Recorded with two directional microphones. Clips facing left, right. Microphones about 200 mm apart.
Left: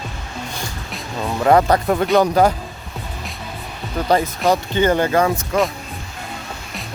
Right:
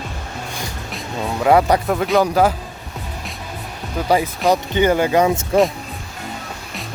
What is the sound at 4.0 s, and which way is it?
Speech, 10° right (ahead or behind).